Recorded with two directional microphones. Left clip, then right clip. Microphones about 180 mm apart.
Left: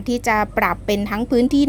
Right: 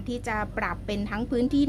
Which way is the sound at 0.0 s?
30° left (ahead or behind).